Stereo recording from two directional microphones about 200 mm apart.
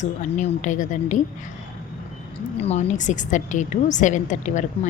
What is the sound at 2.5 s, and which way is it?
A woman's voice, 30° left (ahead or behind).